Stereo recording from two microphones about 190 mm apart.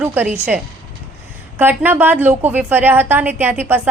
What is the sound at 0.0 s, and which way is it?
Speech, 10° right (ahead or behind).